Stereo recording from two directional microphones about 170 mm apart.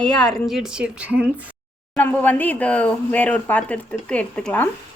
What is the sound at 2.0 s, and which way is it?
Speech, 10° left (ahead or behind).